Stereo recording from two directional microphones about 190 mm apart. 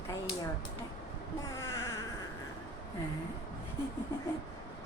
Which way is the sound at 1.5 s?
15° left (ahead or behind).